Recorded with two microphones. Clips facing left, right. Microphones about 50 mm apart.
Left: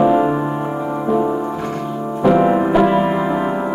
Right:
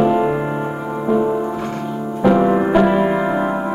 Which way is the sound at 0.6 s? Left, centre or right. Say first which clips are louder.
Left 1 dB; centre.